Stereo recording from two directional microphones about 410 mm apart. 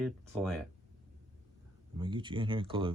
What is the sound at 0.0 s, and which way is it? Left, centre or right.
Speech, centre.